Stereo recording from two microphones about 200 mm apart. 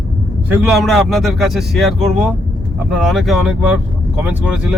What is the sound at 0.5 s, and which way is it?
A man's voice, centre (ahead or behind).